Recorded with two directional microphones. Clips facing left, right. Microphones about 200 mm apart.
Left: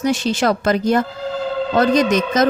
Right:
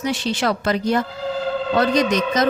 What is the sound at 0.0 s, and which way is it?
A woman's voice, 45° left (ahead or behind).